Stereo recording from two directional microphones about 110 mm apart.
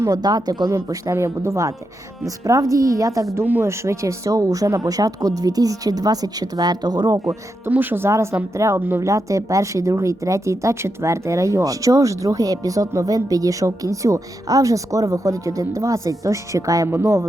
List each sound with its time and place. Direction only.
0.0 s speech: 35° right (ahead or behind)
3.3 s speech: 20° right (ahead or behind); by 7.2 s 40° right (ahead or behind)
7.6 s speech: 20° right (ahead or behind)